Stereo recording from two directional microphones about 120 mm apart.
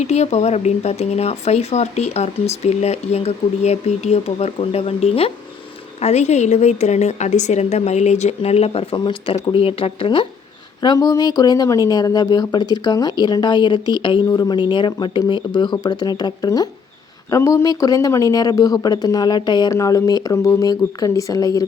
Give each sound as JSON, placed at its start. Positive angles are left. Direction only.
{"t": 0.0, "sound": "speech", "side_deg": 65}
{"t": 6.0, "sound": "a woman's voice", "side_deg": 65}
{"t": 10.8, "sound": "speech", "side_deg": 35}